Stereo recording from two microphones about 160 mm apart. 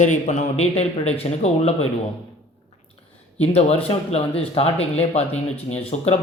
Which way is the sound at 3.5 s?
40° left (ahead or behind).